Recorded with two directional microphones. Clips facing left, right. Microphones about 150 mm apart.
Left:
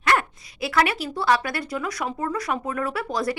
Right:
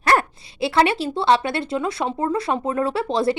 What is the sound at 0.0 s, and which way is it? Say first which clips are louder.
A woman's voice: right 3 dB; 35° right (ahead or behind).